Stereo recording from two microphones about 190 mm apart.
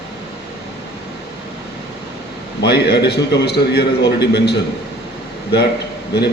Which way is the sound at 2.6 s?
60° left (ahead or behind).